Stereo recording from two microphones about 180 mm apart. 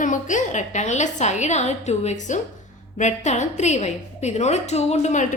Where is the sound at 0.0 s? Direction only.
45° left (ahead or behind).